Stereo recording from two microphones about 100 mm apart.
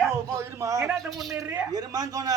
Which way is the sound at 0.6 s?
30° right (ahead or behind).